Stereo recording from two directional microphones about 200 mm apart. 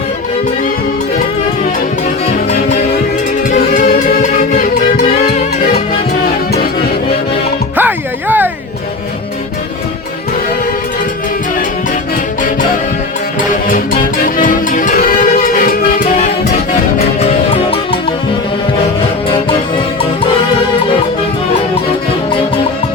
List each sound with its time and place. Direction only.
2.2 s music: 30° left (ahead or behind)
7.8 s music: 10° right (ahead or behind)
13.5 s music: 40° left (ahead or behind)
17.2 s music: 30° left (ahead or behind)